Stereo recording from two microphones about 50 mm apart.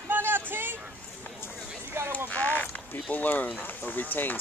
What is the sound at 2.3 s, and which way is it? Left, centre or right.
Speech, left.